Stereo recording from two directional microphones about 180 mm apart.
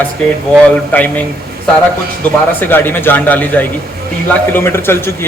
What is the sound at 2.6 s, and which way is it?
Speech, 10° left (ahead or behind).